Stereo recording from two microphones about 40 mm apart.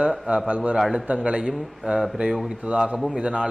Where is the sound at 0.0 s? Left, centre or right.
Right.